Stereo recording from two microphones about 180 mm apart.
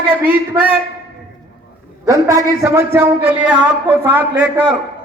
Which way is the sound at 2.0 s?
20° right (ahead or behind).